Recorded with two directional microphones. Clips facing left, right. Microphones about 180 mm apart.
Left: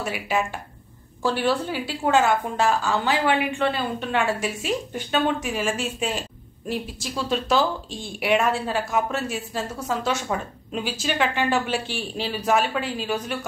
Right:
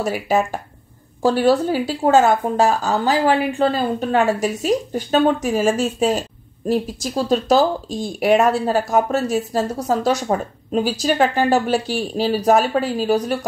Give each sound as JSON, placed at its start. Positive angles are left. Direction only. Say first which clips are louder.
{"t": 0.0, "sound": "speech", "louder": "right 6 dB", "side_deg": -40}